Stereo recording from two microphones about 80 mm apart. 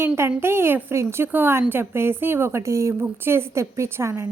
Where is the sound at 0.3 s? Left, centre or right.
Right.